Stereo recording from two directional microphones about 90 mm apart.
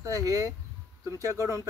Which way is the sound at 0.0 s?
40° right (ahead or behind).